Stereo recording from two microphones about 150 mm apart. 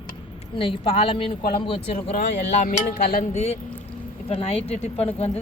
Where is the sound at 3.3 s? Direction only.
45° left (ahead or behind).